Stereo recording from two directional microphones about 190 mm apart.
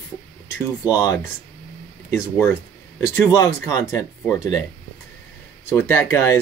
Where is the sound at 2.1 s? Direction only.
10° left (ahead or behind).